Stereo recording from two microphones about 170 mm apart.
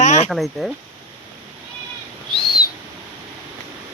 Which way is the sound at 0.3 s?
Centre (ahead or behind).